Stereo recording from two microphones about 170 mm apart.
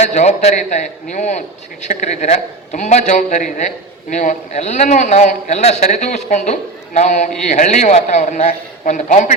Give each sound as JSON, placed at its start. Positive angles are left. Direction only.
{"t": 0.0, "sound": "a man's voice", "side_deg": 45}